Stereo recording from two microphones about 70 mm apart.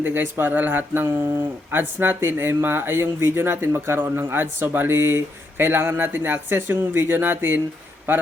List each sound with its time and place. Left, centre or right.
0.0 s speech: right